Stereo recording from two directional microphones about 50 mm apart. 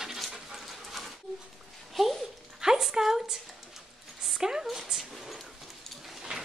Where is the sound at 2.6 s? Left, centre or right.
Centre.